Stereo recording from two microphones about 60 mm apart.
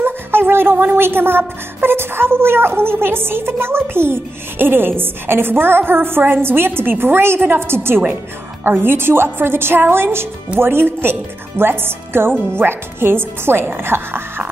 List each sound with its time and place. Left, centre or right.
0.0 s music: right
0.9 s a woman's voice: right